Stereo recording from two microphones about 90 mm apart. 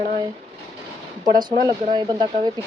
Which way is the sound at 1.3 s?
50° right (ahead or behind).